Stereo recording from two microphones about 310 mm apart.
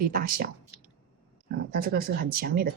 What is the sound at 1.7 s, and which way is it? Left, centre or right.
Speech, right.